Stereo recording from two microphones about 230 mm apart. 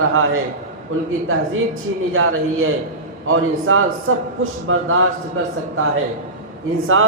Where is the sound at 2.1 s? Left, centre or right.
Right.